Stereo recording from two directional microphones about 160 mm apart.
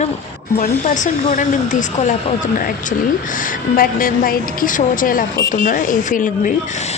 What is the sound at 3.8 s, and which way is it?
Speech, 60° left (ahead or behind).